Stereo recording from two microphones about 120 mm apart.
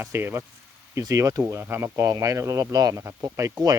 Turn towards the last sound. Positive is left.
turn(degrees=-30)  # may be behind; listen again after turning